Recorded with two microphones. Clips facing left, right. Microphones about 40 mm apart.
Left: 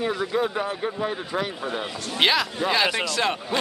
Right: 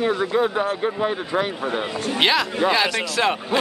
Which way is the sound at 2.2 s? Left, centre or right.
Centre.